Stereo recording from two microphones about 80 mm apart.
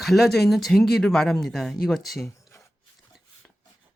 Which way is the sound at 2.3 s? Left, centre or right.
Left.